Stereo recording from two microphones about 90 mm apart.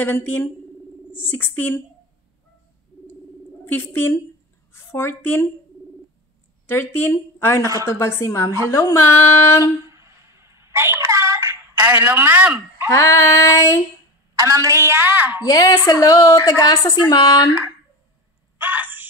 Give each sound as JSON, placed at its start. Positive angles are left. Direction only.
{"t": 0.0, "sound": "speech", "side_deg": 20}
{"t": 3.6, "sound": "a woman's voice", "side_deg": 20}
{"t": 6.7, "sound": "a woman's voice", "side_deg": 25}
{"t": 9.8, "sound": "a sound", "side_deg": -35}
{"t": 12.9, "sound": "a woman's voice", "side_deg": 30}
{"t": 14.3, "sound": "a woman's voice", "side_deg": -40}
{"t": 15.4, "sound": "speech", "side_deg": 45}
{"t": 18.6, "sound": "a sound", "side_deg": -20}